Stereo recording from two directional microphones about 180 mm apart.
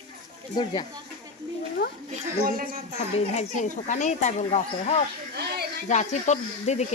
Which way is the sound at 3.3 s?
40° left (ahead or behind).